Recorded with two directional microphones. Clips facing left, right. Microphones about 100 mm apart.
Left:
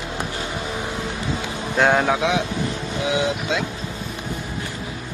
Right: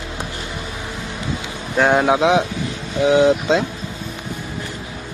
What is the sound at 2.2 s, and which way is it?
A man's voice, 25° right (ahead or behind).